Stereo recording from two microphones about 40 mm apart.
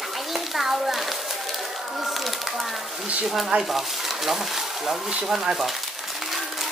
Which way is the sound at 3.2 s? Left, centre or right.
Centre.